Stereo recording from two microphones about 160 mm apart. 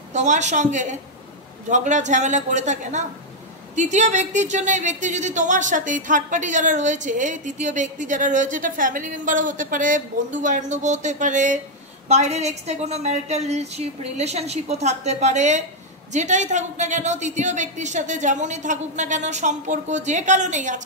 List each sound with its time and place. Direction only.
0.1 s speech: 45° right (ahead or behind)